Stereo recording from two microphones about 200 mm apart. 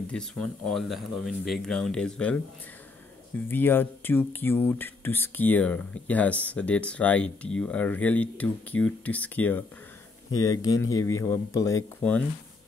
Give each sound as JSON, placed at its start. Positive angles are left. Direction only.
{"t": 0.1, "sound": "speech", "side_deg": 5}
{"t": 3.3, "sound": "speech", "side_deg": 10}